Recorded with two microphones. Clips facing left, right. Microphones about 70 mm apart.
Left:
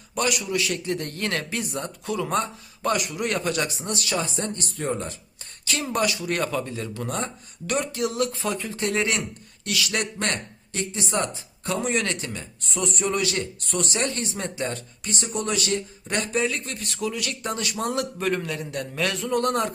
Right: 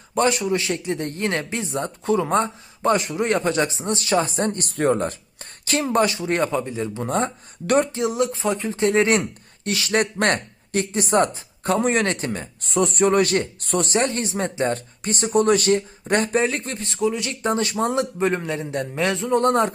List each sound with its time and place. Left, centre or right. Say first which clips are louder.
0.1 s speech: right 6 dB; right
5.8 s speech: right 5 dB; right
10.2 s speech: right 7 dB; right
16.8 s speech: right 7 dB; right